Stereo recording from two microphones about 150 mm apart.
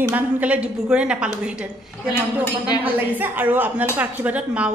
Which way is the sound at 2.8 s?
10° right (ahead or behind).